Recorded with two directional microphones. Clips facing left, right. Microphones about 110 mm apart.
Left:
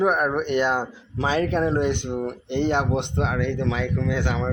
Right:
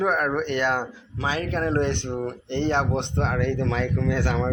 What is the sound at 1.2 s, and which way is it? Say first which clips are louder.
Speech: left 4 dB; 30° left (ahead or behind).